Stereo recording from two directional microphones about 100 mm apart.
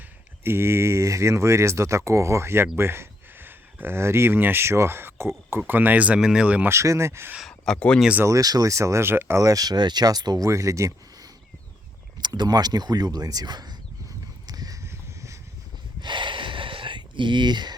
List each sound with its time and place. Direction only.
0.4 s speech: 25° right (ahead or behind)
6.7 s speech: 30° right (ahead or behind)
7.3 s speech: 5° left (ahead or behind)
8.2 s speech: 35° right (ahead or behind)
9.4 s speech: 35° right (ahead or behind)
12.2 s speech: 45° right (ahead or behind)
14.4 s crow: 40° right (ahead or behind)
16.0 s a sound: 50° right (ahead or behind)